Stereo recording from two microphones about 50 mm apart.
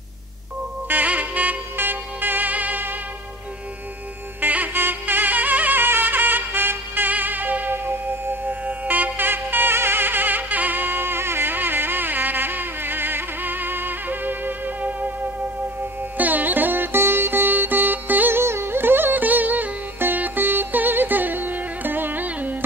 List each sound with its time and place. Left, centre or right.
0.8 s music: right
4.4 s music: right
4.7 s music: right
16.2 s music: right
18.4 s music: right